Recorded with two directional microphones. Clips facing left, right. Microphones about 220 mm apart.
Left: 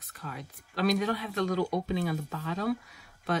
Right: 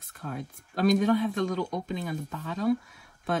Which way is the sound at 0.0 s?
50° right (ahead or behind).